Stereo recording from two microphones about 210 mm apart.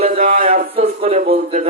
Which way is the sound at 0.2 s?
40° right (ahead or behind).